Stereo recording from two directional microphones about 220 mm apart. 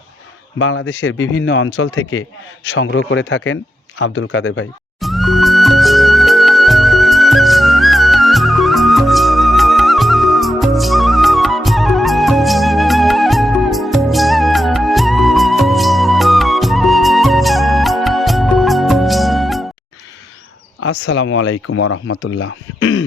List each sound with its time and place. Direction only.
0.6 s speech: 65° left (ahead or behind)
1.6 s speech: 65° left (ahead or behind)
4.9 s music: centre (ahead or behind)
20.8 s speech: 55° left (ahead or behind)